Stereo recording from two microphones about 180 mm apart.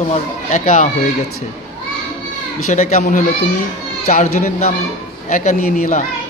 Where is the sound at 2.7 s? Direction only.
40° left (ahead or behind).